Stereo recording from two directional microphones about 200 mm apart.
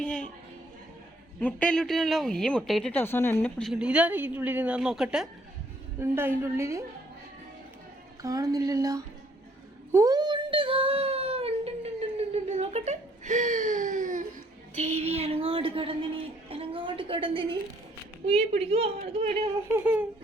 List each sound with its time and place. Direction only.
0.0 s a sound: 5° left (ahead or behind)
1.4 s a woman's voice: 5° left (ahead or behind); by 6.8 s 15° right (ahead or behind)
8.2 s a woman's voice: 15° right (ahead or behind)
9.9 s child singing: 15° right (ahead or behind); by 14.3 s 40° right (ahead or behind)
14.8 s a sound: 35° right (ahead or behind)
18.3 s a woman's voice: 30° right (ahead or behind)
19.7 s a woman's voice: 10° right (ahead or behind)